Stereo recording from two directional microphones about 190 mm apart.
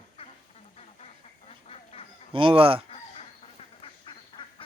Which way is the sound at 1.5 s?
35° left (ahead or behind).